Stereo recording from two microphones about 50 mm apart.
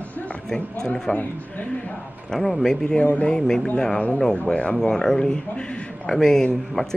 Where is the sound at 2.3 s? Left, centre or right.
Centre.